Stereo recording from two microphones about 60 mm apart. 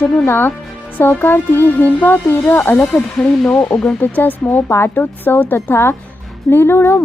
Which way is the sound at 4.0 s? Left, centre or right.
Left.